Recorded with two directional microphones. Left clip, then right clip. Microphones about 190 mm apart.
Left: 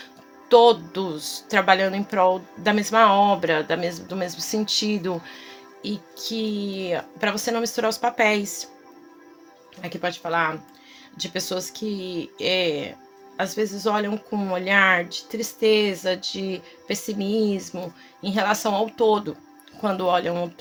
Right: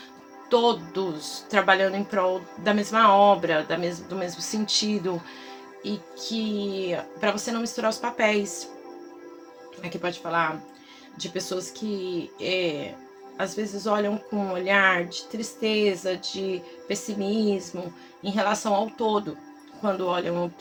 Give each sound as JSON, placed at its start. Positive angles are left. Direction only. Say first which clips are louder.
{"t": 0.4, "sound": "speech", "louder": "left 7 dB", "side_deg": 55}
{"t": 10.0, "sound": "speech", "louder": "left 2 dB", "side_deg": 55}